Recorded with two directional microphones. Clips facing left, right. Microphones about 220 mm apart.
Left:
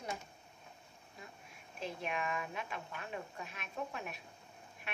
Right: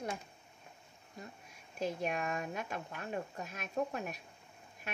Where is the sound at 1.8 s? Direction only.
40° right (ahead or behind).